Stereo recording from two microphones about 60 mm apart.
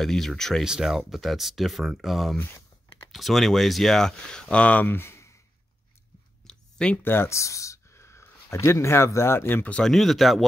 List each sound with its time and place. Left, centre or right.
0.0 s speech: centre
0.7 s speech: centre
2.3 s speech: left
3.1 s speech: centre; by 4.8 s left
4.8 s speech: left
6.4 s a sound: centre
7.0 s speech: left
7.3 s speech: left
9.8 s speech: centre